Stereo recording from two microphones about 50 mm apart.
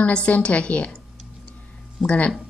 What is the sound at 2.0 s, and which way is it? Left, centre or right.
Speech, centre.